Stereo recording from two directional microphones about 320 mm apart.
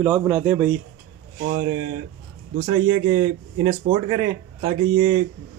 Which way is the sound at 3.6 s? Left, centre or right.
Centre.